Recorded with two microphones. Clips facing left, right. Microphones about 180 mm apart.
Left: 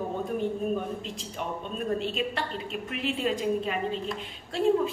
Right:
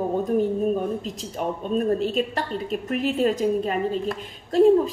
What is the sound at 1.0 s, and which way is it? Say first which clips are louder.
A woman's voice: right 7 dB; 40° right (ahead or behind).